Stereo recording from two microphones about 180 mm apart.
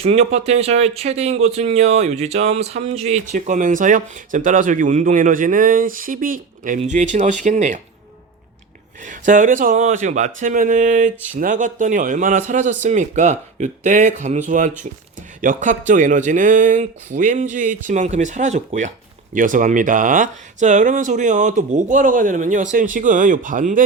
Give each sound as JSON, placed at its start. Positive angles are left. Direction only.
{"t": 0.0, "sound": "speech", "side_deg": -35}
{"t": 9.0, "sound": "speech", "side_deg": -45}